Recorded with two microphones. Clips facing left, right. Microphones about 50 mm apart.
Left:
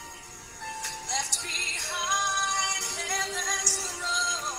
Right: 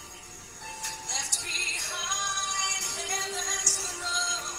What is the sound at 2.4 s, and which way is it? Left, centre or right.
Music, left.